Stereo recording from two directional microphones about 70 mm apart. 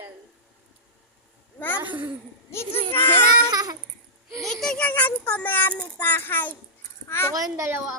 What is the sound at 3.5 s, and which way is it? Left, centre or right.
Babbling, right.